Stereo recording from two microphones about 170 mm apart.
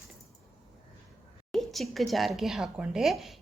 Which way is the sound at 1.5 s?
Centre (ahead or behind).